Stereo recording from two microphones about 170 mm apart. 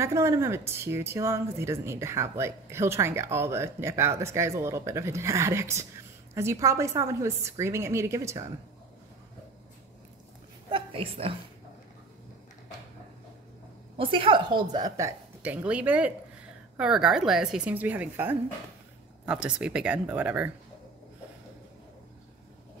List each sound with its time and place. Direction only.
0.0 s a woman's voice: 15° right (ahead or behind)
10.7 s a woman's voice: 30° right (ahead or behind)
13.9 s a woman's voice: 30° right (ahead or behind); by 20.5 s 10° right (ahead or behind)